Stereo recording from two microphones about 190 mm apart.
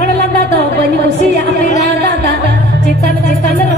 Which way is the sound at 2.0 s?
65° right (ahead or behind).